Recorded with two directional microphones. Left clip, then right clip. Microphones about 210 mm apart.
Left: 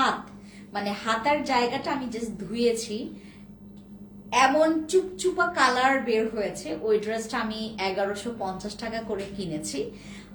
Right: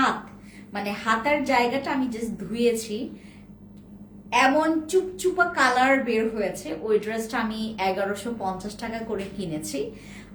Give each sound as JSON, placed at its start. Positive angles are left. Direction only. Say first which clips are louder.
{"t": 0.7, "sound": "a woman's voice", "louder": "right 2 dB", "side_deg": -15}
{"t": 4.3, "sound": "a woman's voice", "louder": "even", "side_deg": -15}